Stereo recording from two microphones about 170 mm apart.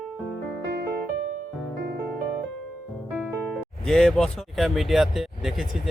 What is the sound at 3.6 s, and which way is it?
Speech, 5° left (ahead or behind).